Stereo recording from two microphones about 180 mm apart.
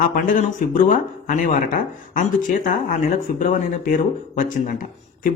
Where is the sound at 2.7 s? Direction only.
45° left (ahead or behind).